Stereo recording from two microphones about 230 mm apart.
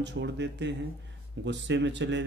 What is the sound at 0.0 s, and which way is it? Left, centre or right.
Speech, right.